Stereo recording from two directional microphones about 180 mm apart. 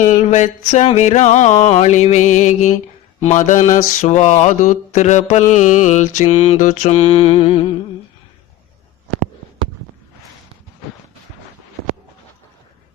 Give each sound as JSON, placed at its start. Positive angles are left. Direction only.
{"t": 0.0, "sound": "mantra", "side_deg": 40}